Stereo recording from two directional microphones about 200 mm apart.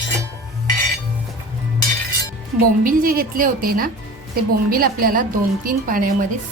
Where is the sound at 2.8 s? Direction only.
45° right (ahead or behind).